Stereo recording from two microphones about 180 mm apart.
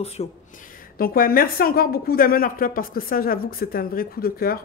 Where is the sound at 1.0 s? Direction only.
55° left (ahead or behind).